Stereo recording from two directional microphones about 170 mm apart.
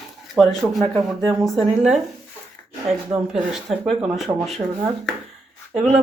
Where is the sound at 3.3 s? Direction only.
Centre (ahead or behind).